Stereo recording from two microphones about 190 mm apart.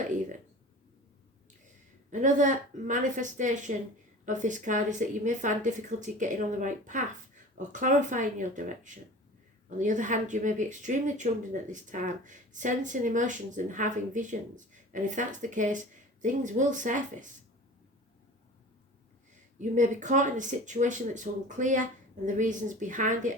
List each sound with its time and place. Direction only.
2.0 s speech: 40° right (ahead or behind)
19.5 s speech: 40° right (ahead or behind)